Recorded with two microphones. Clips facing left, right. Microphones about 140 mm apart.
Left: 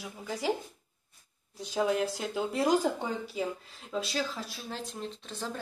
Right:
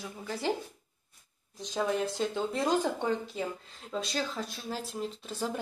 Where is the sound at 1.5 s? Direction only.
10° left (ahead or behind); by 5.6 s 10° right (ahead or behind).